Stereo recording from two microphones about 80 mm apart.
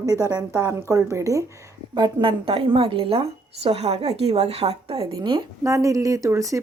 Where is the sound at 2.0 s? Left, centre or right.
Right.